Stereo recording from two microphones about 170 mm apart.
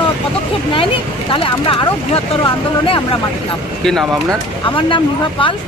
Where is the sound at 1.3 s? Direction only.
30° left (ahead or behind).